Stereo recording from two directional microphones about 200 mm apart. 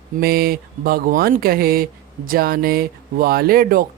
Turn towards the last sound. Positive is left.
turn(degrees=-45)  # may be behind; listen again after turning